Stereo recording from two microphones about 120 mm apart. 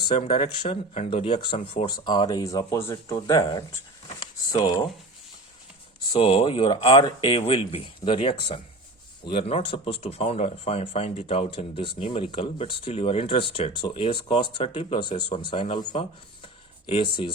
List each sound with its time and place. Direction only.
0.3 s speech: 45° left (ahead or behind)
6.1 s speech: 55° left (ahead or behind)
15.2 s speech: 45° left (ahead or behind)